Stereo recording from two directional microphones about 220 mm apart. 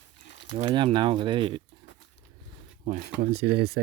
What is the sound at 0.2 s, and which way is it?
Crumpling, 55° left (ahead or behind).